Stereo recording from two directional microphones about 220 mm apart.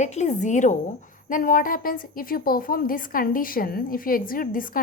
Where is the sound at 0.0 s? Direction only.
30° left (ahead or behind).